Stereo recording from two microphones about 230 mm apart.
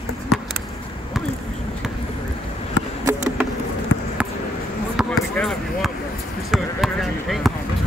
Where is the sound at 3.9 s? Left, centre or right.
Left.